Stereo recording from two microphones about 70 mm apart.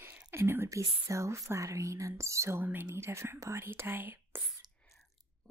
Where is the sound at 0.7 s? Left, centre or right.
Right.